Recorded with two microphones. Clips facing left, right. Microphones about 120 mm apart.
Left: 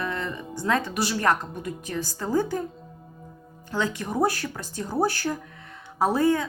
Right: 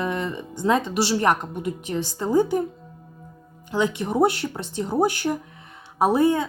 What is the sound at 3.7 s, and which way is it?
A woman's voice, 15° right (ahead or behind).